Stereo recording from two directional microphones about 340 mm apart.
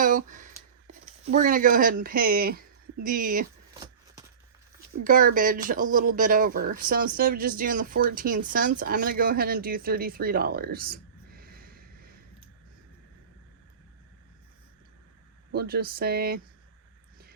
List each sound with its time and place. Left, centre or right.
0.0 s speech: right
5.0 s speech: right
15.5 s speech: right